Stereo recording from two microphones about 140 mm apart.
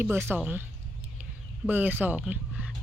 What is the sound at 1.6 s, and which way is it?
Speech, 10° right (ahead or behind).